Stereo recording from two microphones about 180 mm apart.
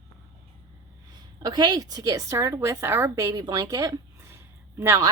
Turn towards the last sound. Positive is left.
turn(degrees=-15)  # may be behind; listen again after turning